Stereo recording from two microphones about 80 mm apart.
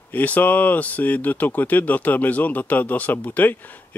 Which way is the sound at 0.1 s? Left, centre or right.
Left.